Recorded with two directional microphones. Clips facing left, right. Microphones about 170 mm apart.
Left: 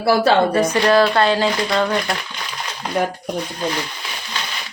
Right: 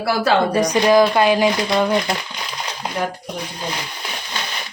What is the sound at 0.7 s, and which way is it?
Speech, 15° right (ahead or behind).